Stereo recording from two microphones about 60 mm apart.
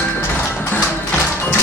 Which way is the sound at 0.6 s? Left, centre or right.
Left.